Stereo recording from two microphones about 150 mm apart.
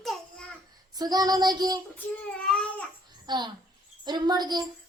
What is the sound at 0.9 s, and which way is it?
Speech, 25° right (ahead or behind).